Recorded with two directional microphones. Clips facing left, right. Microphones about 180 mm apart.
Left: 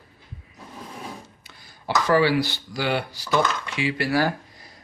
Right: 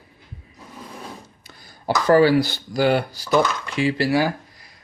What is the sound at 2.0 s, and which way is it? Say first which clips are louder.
Speech: right 5 dB; 40° right (ahead or behind).